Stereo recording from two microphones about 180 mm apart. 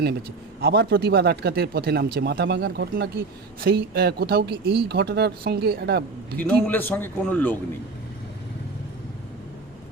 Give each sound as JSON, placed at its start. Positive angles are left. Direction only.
{"t": 0.0, "sound": "speech", "side_deg": -60}
{"t": 6.3, "sound": "a man's voice", "side_deg": 10}